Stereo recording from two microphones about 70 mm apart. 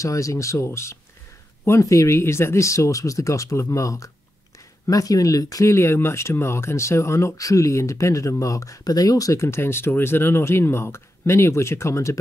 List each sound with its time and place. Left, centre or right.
0.0 s speech: left
4.8 s speech: left
9.4 s speech: left